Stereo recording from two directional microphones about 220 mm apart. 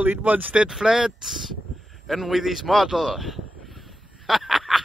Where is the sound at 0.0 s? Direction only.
5° right (ahead or behind).